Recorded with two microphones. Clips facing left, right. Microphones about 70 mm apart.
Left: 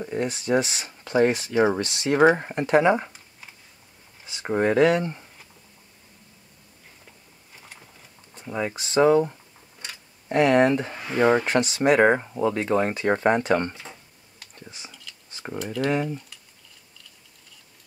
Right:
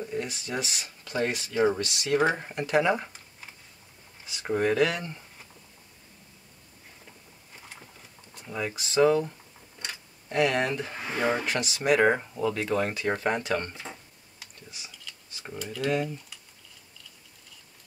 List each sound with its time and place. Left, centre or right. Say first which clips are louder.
0.0 s speech: left 5 dB; left
0.8 s speech: left 7 dB; left
4.3 s speech: left 3 dB; left
7.6 s a sound: even; centre
8.4 s speech: left 4 dB; left
14.9 s a sound: left 1 dB; centre
15.6 s speech: left 5 dB; centre
15.9 s speech: left 1 dB; left